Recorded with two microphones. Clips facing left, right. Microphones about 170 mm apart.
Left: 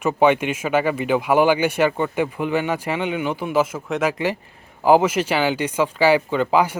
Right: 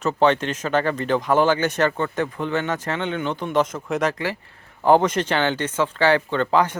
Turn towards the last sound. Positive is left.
turn(degrees=10)  # may be behind; listen again after turning